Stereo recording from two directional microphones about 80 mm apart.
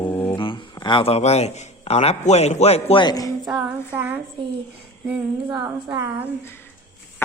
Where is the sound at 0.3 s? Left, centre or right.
Left.